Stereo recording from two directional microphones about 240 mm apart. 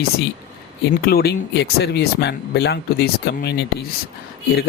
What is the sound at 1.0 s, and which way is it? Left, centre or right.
Speech, left.